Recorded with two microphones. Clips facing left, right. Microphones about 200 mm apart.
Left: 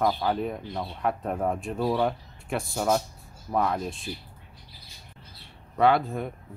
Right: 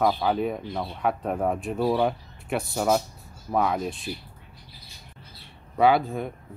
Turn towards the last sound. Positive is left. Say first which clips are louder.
# right 2 dB
turn(degrees=0)  # may be behind; listen again after turning